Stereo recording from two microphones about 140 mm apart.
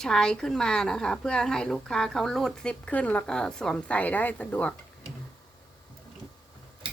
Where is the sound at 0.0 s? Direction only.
5° left (ahead or behind).